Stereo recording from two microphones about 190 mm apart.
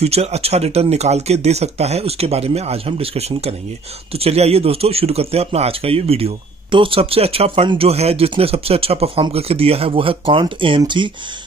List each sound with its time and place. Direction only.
0.0 s speech: 35° right (ahead or behind)